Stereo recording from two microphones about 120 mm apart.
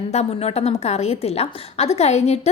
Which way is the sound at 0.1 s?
60° left (ahead or behind).